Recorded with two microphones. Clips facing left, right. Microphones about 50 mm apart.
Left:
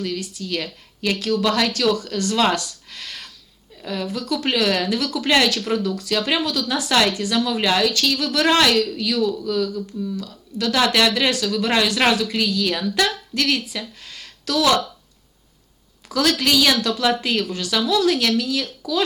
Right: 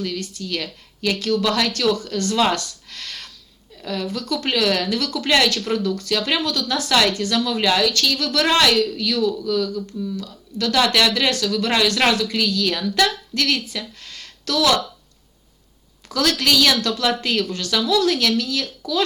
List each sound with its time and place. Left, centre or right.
0.1 s a woman's voice: centre
2.9 s a sound: centre
3.8 s a woman's voice: centre
5.8 s speech: centre
6.1 s a woman's voice: centre
13.1 s a woman's voice: left
13.7 s a sound: centre
14.5 s speech: left
16.0 s a woman's voice: centre